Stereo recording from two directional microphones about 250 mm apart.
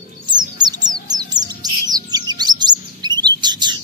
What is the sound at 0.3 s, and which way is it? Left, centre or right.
Bird, centre.